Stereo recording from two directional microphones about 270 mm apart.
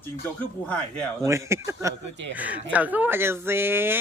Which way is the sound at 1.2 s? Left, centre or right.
Centre.